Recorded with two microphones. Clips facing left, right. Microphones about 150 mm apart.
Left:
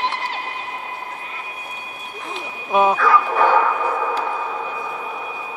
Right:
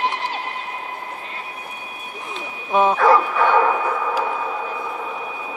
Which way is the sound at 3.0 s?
35° right (ahead or behind).